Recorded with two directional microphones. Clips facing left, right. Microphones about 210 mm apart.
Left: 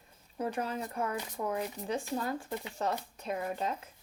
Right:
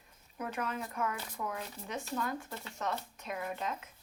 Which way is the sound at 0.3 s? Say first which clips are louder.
Left 3 dB; 30° left (ahead or behind).